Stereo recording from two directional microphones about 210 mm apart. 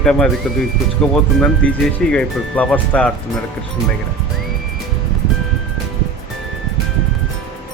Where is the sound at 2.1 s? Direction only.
5° left (ahead or behind).